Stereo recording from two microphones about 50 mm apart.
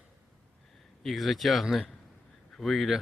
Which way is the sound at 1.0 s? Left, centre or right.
Centre.